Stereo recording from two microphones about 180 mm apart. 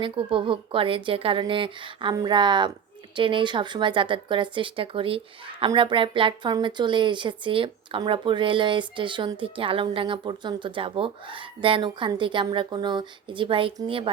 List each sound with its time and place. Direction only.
0.0 s speech: 30° right (ahead or behind)